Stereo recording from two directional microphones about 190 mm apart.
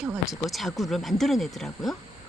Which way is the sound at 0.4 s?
Centre (ahead or behind).